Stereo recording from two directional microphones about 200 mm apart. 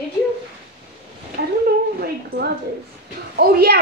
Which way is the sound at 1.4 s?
55° right (ahead or behind).